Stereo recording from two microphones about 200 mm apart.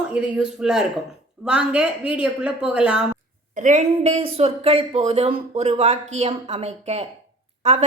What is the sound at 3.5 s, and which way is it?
Speech, 40° right (ahead or behind).